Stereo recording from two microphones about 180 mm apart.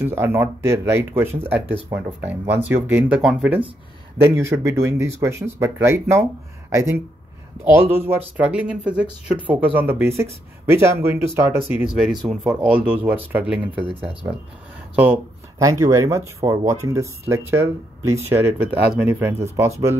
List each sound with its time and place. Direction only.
0.0 s speech: 15° right (ahead or behind)
15.6 s speech: 15° right (ahead or behind)